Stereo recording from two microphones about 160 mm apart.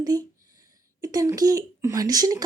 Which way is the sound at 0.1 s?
25° right (ahead or behind).